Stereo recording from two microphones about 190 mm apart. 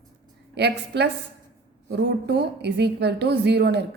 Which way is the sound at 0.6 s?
60° right (ahead or behind).